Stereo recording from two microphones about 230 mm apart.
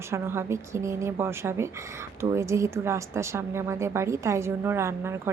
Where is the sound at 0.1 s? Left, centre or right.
Centre.